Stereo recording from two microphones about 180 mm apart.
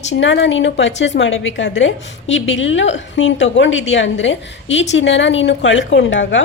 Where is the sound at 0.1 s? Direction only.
85° left.